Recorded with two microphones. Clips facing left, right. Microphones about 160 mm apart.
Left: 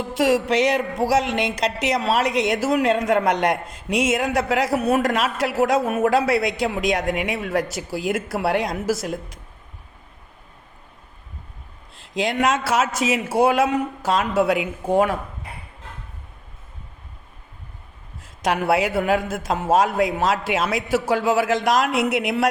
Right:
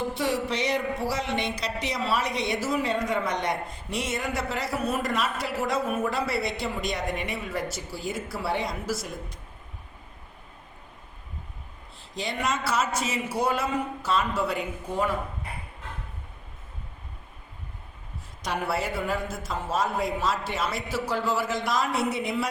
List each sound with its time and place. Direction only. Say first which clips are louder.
0.2 s a woman's voice: left 12 dB; 90° left
11.9 s a woman's voice: left 10 dB; 90° left
18.2 s a woman's voice: left 8 dB; 90° left